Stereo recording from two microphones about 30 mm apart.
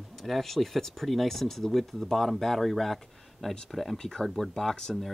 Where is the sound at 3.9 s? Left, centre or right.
Left.